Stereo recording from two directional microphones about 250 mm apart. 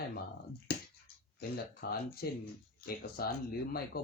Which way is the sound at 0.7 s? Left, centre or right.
Left.